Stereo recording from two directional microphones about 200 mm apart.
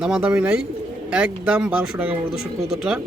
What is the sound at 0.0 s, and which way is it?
Speech, 5° right (ahead or behind).